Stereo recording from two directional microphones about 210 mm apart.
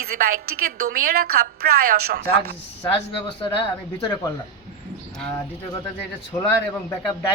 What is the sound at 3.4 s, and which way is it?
Speech, 20° left (ahead or behind).